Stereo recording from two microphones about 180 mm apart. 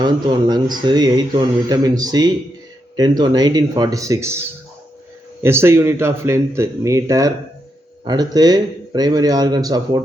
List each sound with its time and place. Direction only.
0.0 s speech: 25° right (ahead or behind)